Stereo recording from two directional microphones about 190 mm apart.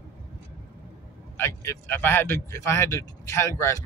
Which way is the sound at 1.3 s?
15° left (ahead or behind).